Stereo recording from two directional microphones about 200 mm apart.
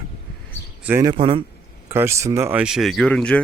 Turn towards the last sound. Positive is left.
turn(degrees=5)  # may be behind; listen again after turning